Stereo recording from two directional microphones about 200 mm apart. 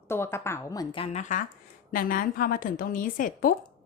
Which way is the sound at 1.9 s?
45° left (ahead or behind).